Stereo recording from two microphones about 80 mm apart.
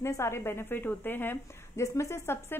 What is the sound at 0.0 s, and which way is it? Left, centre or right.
A woman's voice, left.